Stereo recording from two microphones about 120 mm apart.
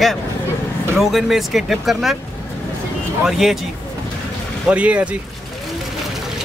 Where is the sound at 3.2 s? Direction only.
Centre (ahead or behind).